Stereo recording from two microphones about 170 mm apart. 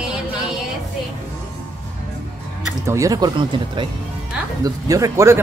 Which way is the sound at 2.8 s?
20° right (ahead or behind).